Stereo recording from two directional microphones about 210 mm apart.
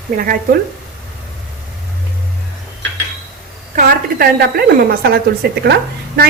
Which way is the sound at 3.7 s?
45° right (ahead or behind).